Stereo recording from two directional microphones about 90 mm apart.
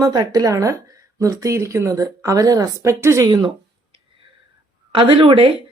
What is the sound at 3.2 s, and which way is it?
Speech, 50° right (ahead or behind).